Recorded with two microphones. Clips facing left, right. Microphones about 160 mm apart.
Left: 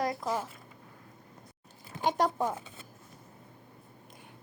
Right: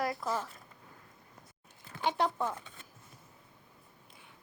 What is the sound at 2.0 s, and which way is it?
Speech, 45° left (ahead or behind).